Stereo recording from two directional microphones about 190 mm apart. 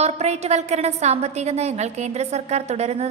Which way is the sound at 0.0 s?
35° right (ahead or behind).